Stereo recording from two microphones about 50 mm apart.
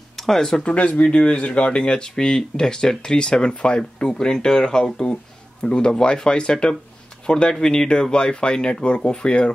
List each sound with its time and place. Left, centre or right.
0.1 s speech: centre
0.7 s speech: left